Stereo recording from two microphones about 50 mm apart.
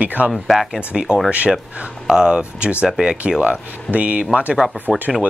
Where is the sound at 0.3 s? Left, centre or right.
Centre.